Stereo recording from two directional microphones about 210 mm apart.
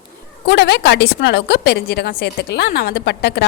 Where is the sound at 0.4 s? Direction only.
55° left (ahead or behind).